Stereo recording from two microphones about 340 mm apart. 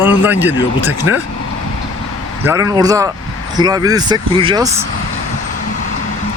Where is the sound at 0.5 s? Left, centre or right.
Left.